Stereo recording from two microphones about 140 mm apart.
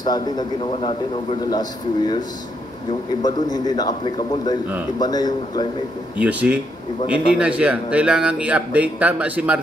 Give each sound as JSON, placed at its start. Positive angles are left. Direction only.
{"t": 0.0, "sound": "a man's voice", "side_deg": 30}
{"t": 0.7, "sound": "a man's voice", "side_deg": 40}
{"t": 1.5, "sound": "a man's voice", "side_deg": 30}
{"t": 3.2, "sound": "a man's voice", "side_deg": 30}
{"t": 6.1, "sound": "speech", "side_deg": -10}